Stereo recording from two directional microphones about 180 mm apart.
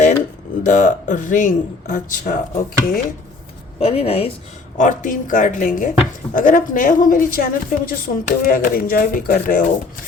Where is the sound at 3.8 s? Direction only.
35° left (ahead or behind).